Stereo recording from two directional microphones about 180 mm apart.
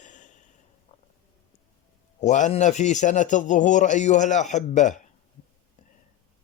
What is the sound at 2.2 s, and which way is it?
A man's voice, 40° left (ahead or behind).